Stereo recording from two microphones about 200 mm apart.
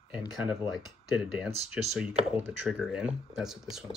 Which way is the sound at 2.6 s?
Centre (ahead or behind).